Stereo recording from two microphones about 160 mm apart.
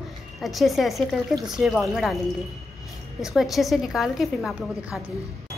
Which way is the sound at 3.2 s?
Centre (ahead or behind).